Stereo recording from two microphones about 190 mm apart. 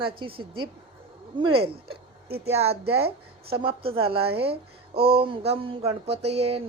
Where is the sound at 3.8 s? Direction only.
30° right (ahead or behind).